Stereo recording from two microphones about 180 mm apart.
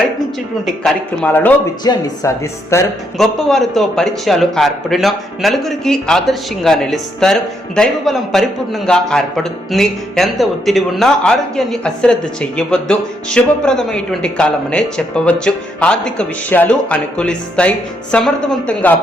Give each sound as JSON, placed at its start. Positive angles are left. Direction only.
{"t": 0.6, "sound": "speech", "side_deg": 5}
{"t": 3.2, "sound": "a man's voice", "side_deg": 0}